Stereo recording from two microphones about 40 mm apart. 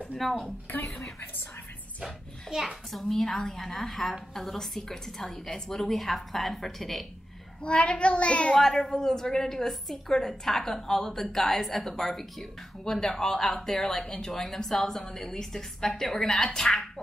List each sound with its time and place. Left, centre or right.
0.2 s a woman's voice: centre
2.6 s a woman's voice: centre
7.6 s a child's voice: left
8.5 s a woman's voice: centre